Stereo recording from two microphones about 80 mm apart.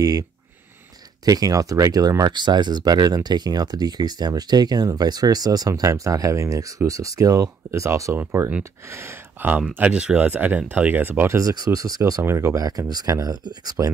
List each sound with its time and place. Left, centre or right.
0.0 s speech: right
9.5 s speech: centre
11.3 s speech: right
12.6 s speech: right